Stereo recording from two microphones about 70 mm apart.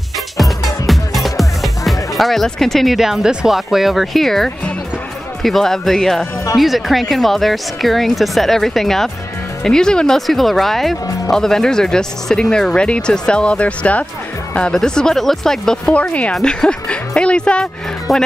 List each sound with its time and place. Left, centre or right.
0.4 s music: centre
5.4 s speech: centre
18.1 s speech: centre